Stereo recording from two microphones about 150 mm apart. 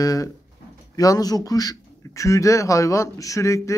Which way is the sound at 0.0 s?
25° left (ahead or behind).